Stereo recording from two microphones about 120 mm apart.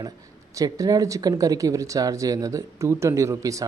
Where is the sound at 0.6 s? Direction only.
30° right (ahead or behind).